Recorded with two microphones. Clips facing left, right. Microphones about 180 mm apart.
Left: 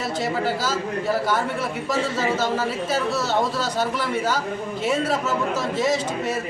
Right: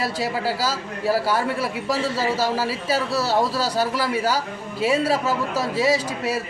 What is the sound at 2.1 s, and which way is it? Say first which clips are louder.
Speech: even; 35° right (ahead or behind).